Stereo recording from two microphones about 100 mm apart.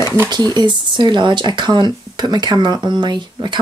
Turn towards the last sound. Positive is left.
turn(degrees=-50)  # may be behind; listen again after turning